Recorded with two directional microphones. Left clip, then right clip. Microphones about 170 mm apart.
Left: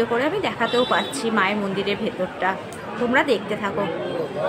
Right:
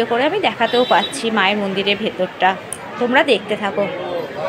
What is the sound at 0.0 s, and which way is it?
A woman's voice, 15° right (ahead or behind).